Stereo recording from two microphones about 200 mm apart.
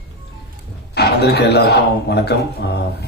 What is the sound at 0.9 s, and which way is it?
Speech, 55° left (ahead or behind).